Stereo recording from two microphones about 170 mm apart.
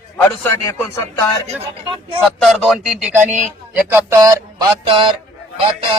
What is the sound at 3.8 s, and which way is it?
Speech, 15° right (ahead or behind).